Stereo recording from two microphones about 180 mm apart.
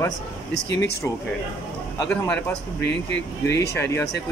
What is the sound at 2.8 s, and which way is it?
Speech, 80° left.